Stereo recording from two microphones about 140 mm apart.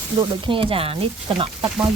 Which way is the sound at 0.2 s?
35° right (ahead or behind).